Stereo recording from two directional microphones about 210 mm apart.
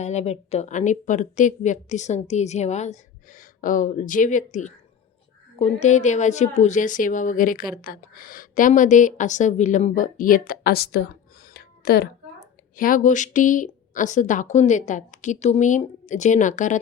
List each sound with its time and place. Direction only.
0.0 s speech: 30° left (ahead or behind)